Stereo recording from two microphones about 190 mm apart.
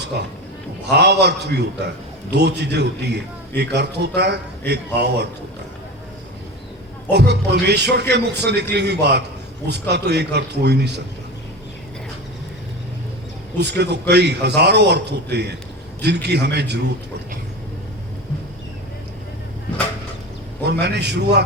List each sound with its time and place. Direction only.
0.1 s a man's voice: 60° right (ahead or behind)
7.1 s a man's voice: 60° right (ahead or behind)
13.6 s a man's voice: 60° right (ahead or behind)
20.7 s a man's voice: 60° right (ahead or behind)